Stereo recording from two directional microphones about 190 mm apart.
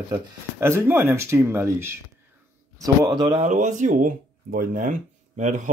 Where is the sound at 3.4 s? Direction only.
40° right (ahead or behind).